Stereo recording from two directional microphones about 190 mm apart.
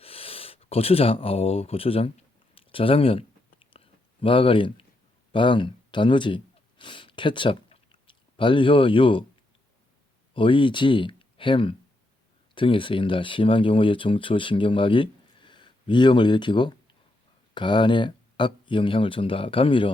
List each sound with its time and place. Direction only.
0.0 s speech: 30° left (ahead or behind)
2.6 s a sound: 30° left (ahead or behind)
5.3 s speech: 25° left (ahead or behind)
10.3 s speech: 25° left (ahead or behind)